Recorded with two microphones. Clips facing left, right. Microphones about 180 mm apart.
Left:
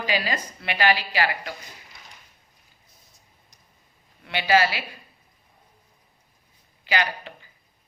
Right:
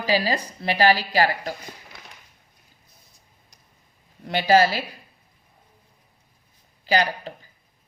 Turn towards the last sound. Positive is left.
turn(degrees=-40)  # may be behind; listen again after turning